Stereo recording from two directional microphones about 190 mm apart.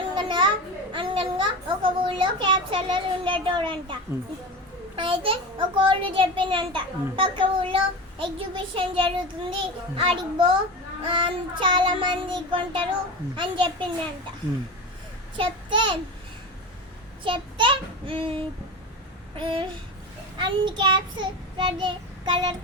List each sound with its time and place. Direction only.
0.2 s a sound: 25° right (ahead or behind)
0.9 s a child's voice: 25° right (ahead or behind)
4.9 s a child's voice: 30° right (ahead or behind)
15.4 s a child's voice: 25° right (ahead or behind)
17.2 s child singing: 25° right (ahead or behind)
19.4 s a child's voice: 25° right (ahead or behind)